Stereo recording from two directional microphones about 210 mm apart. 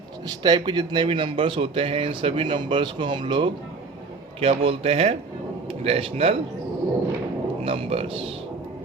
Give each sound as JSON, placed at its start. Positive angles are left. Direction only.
{"t": 0.3, "sound": "a man's voice", "side_deg": -20}
{"t": 7.6, "sound": "a man's voice", "side_deg": -25}